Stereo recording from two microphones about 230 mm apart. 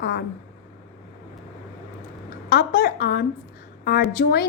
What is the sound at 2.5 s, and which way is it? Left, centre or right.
A woman's voice, left.